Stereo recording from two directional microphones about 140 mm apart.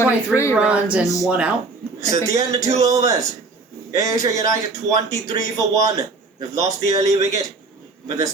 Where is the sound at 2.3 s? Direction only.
25° right (ahead or behind).